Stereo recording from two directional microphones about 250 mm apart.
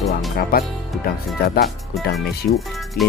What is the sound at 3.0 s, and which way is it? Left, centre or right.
Speech, left.